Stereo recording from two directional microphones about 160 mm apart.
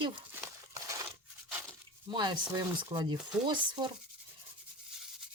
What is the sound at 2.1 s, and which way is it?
Speech, 30° right (ahead or behind).